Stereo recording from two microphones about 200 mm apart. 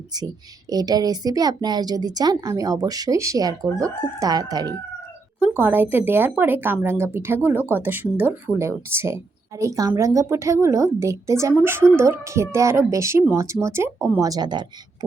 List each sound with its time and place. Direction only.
0.7 s a woman's voice: 20° right (ahead or behind)